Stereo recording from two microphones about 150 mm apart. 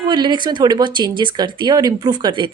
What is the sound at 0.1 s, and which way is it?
A woman's voice, 30° right (ahead or behind).